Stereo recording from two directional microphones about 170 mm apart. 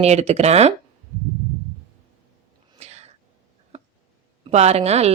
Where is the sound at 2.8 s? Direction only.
40° right (ahead or behind).